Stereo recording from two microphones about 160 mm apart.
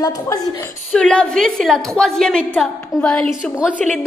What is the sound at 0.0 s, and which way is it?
Speech, 25° left (ahead or behind).